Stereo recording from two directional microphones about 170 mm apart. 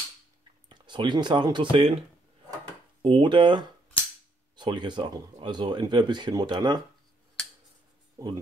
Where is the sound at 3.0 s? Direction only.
30° right (ahead or behind).